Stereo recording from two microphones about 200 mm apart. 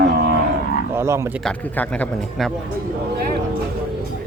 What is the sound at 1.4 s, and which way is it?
Speech, 5° left (ahead or behind).